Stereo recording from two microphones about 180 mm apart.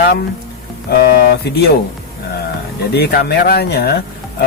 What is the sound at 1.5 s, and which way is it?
Speech, 65° left (ahead or behind).